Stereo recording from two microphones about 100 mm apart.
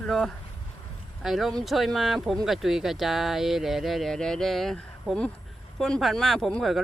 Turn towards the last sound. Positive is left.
turn(degrees=0)  # may be behind; listen again after turning